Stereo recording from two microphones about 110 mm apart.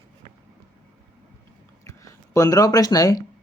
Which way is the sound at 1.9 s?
30° left (ahead or behind).